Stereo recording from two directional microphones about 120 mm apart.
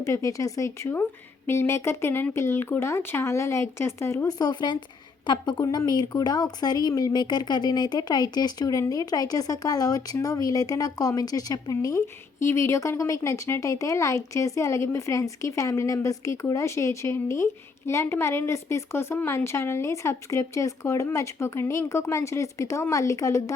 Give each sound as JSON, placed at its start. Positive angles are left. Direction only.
{"t": 0.0, "sound": "speech", "side_deg": 25}